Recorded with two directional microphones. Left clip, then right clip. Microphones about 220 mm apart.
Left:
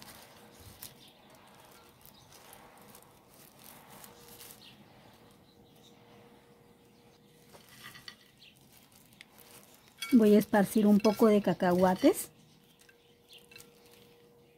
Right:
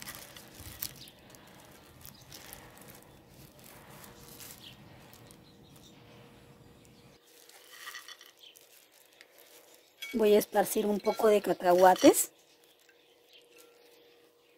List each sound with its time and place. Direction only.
10.1 s stir: 10° right (ahead or behind)
11.8 s speech: 20° right (ahead or behind)